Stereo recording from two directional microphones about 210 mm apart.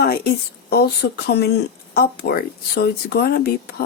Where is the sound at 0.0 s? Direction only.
50° left (ahead or behind).